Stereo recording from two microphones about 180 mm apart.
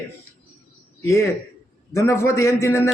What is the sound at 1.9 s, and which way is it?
Speech, 15° left (ahead or behind).